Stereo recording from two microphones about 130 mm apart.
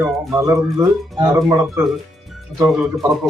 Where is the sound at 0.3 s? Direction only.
25° right (ahead or behind).